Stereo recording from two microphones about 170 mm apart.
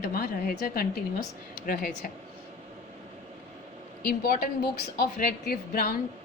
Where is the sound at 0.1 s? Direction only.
60° left (ahead or behind).